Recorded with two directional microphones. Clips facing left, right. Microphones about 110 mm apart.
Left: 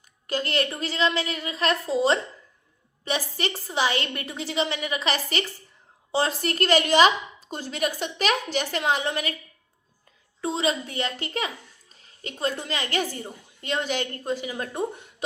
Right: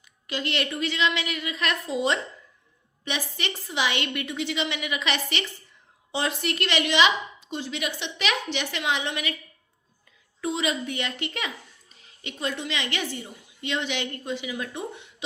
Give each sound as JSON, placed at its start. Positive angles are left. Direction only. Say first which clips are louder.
{"t": 0.3, "sound": "a child's voice", "louder": "left 3 dB", "side_deg": 40}
{"t": 10.4, "sound": "a child's voice", "louder": "left 1 dB", "side_deg": 35}